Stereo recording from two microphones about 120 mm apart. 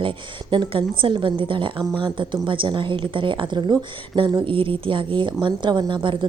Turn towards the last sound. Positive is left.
turn(degrees=-45)  # may be behind; listen again after turning